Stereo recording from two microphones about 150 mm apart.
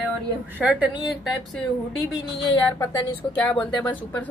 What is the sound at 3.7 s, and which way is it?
Speech, 30° left (ahead or behind).